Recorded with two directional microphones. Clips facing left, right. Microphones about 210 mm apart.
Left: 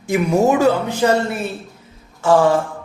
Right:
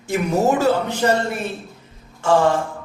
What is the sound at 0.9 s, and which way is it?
Speech, 10° left (ahead or behind).